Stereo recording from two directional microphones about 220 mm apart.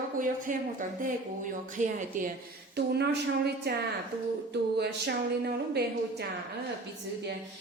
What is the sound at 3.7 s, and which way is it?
Speech, 45° right (ahead or behind).